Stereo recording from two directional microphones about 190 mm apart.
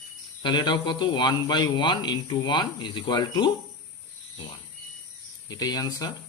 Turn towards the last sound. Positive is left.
turn(degrees=20)  # may be behind; listen again after turning